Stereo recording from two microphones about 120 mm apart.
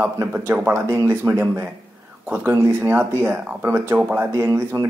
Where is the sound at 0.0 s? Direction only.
15° right (ahead or behind).